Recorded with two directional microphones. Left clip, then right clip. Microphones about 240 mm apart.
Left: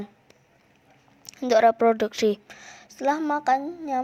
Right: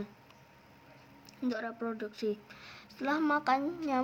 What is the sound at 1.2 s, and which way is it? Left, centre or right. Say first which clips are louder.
A woman's voice: left 19 dB; left.